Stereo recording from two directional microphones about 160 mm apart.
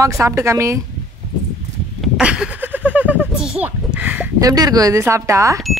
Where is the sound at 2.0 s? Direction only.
5° right (ahead or behind).